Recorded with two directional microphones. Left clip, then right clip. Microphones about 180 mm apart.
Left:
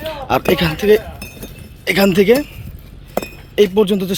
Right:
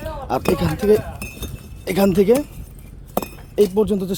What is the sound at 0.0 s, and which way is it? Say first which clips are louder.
Speech: left 5 dB; centre (ahead or behind).